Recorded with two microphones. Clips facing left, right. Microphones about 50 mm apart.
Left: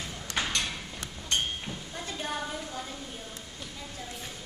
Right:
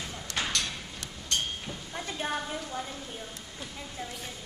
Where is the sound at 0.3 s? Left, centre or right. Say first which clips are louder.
Left 1 dB; left.